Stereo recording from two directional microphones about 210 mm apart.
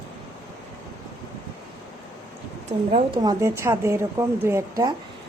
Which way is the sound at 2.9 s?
25° right (ahead or behind).